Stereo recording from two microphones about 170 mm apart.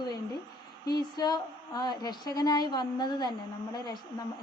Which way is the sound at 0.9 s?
25° left (ahead or behind).